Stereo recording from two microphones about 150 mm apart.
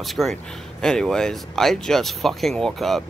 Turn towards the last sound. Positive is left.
turn(degrees=0)  # may be behind; listen again after turning